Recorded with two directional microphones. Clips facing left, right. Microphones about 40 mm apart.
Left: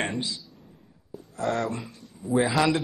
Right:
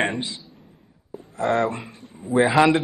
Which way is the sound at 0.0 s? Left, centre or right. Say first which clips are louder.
Right 5 dB; right.